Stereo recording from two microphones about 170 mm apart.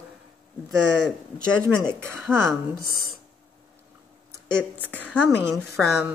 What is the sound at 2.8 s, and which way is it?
Speech, 65° right (ahead or behind).